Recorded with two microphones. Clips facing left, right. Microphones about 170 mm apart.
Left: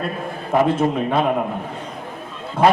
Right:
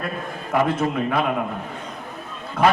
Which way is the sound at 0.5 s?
30° left (ahead or behind).